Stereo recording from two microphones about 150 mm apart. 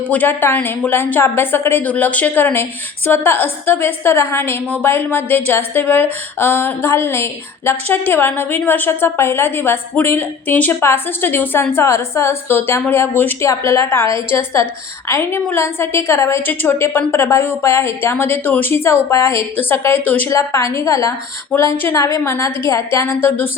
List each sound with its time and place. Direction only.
0.1 s a woman's voice: 10° left (ahead or behind)